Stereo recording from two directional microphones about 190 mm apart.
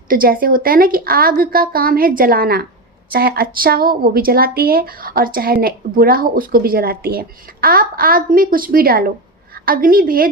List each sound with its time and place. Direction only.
0.1 s speech: 50° right (ahead or behind)